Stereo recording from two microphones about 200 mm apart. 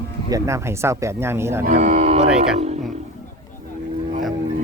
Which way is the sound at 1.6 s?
40° right (ahead or behind).